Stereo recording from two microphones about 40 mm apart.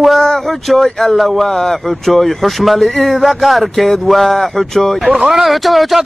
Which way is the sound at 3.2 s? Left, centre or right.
Centre.